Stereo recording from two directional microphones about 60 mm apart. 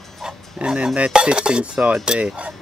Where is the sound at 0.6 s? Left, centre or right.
Right.